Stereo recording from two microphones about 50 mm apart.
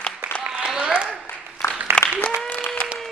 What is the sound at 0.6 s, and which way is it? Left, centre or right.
Applause, centre.